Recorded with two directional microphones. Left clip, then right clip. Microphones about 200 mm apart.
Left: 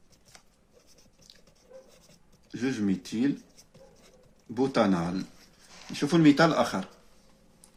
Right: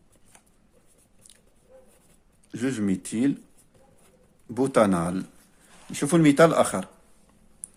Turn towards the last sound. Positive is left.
turn(degrees=-35)  # may be behind; listen again after turning